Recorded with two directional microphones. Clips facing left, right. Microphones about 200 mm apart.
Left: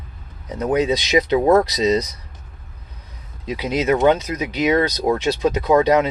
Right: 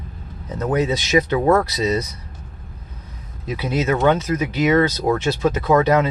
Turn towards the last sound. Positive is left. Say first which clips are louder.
# left 1 dB
turn(degrees=15)  # may be behind; listen again after turning